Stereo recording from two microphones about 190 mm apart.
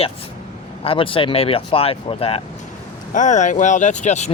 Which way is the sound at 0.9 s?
30° left (ahead or behind).